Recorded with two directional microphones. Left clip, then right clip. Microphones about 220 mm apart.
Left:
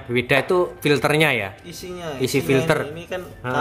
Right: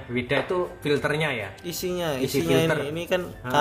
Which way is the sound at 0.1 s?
40° left (ahead or behind).